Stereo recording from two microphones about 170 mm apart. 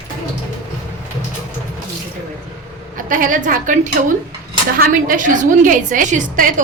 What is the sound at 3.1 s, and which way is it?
Speech, 50° right (ahead or behind).